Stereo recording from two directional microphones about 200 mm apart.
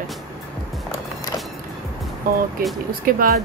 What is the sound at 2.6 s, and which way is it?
Speech, 45° right (ahead or behind).